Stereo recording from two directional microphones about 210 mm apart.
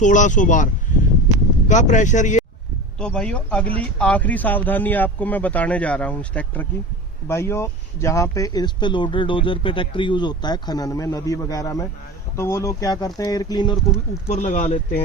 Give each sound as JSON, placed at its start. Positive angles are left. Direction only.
{"t": 0.0, "sound": "speech", "side_deg": 35}
{"t": 3.0, "sound": "speech", "side_deg": 5}
{"t": 14.3, "sound": "speech", "side_deg": 35}